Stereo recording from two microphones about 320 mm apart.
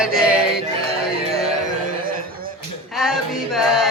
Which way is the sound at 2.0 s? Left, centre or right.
Right.